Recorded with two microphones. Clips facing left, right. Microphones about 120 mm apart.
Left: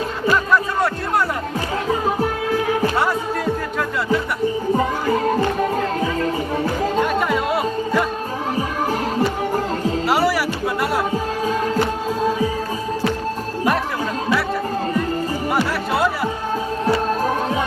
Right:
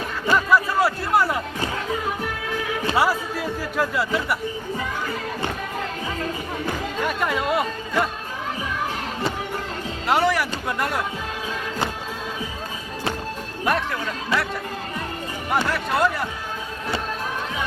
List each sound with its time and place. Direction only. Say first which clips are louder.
0.5 s a sound: left 1 dB; 5° right (ahead or behind)
1.9 s music: left 6 dB; 35° left (ahead or behind)
2.9 s music: left 1 dB; 5° right (ahead or behind)
4.8 s music: left 9 dB; 40° left (ahead or behind)
7.2 s music: left 3 dB; centre (ahead or behind)
10.1 s music: even; 5° left (ahead or behind)
15.5 s music: even; 5° left (ahead or behind)
17.1 s music: left 9 dB; 40° left (ahead or behind)